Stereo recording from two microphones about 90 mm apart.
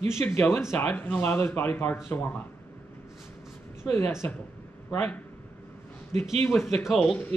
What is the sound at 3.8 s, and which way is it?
Speech, 25° left (ahead or behind).